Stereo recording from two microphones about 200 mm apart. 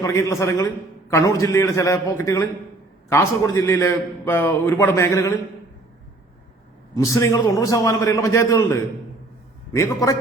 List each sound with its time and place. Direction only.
0.0 s a man's voice: 15° left (ahead or behind)
6.9 s a man's voice: 15° left (ahead or behind)